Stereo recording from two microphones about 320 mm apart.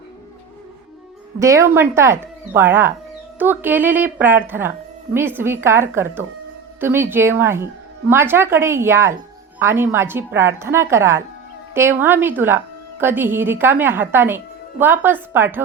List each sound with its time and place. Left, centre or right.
1.4 s a woman's voice: centre